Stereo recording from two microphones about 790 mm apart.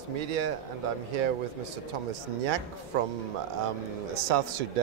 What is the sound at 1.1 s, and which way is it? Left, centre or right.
Speech, right.